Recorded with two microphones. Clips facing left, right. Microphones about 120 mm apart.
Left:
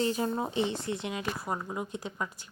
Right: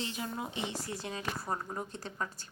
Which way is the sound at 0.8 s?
20° left (ahead or behind).